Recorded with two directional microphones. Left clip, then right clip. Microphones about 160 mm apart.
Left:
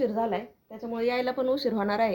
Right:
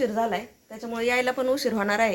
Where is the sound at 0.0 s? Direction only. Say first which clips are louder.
Right 2 dB; centre (ahead or behind).